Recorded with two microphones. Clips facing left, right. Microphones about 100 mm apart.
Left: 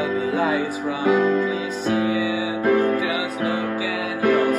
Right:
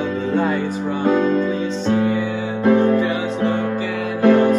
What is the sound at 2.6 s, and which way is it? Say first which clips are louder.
Music: right 4 dB; 25° right (ahead or behind).